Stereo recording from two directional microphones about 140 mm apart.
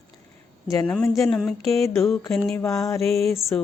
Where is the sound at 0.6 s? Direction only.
25° left (ahead or behind).